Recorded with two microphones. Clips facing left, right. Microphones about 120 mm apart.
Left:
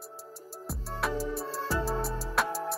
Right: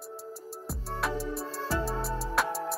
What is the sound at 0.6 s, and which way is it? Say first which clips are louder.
Music: even; centre (ahead or behind).